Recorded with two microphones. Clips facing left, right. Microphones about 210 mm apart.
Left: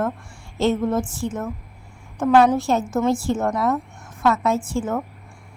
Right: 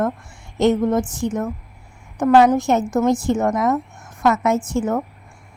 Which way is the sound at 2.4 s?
15° right (ahead or behind).